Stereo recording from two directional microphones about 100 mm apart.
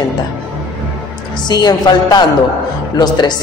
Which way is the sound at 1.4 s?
45° left (ahead or behind).